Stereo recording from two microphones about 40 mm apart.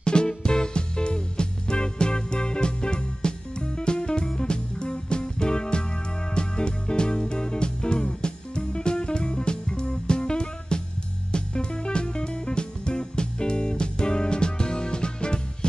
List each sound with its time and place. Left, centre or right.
0.0 s music: left